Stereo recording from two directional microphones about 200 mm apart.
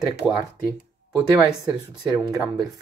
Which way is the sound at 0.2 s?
5° left (ahead or behind).